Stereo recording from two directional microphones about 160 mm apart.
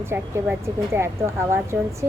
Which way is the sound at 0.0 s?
15° right (ahead or behind).